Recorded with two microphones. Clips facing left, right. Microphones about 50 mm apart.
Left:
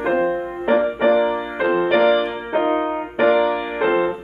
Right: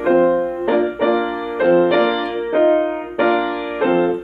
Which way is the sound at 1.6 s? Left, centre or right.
Centre.